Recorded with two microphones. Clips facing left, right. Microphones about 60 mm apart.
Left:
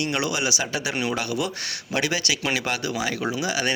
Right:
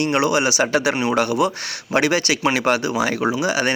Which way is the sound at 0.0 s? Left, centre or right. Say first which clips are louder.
Right 7 dB; right.